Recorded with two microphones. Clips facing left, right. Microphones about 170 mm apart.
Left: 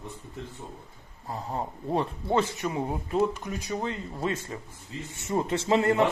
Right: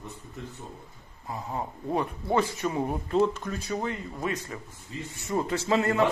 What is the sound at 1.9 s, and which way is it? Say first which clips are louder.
A man's voice: even; 25° left (ahead or behind).